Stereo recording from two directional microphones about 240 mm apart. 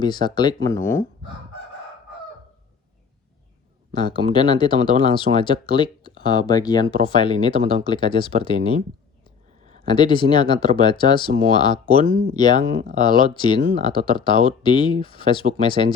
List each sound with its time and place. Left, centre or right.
0.0 s speech: centre
3.9 s speech: centre
9.8 s speech: centre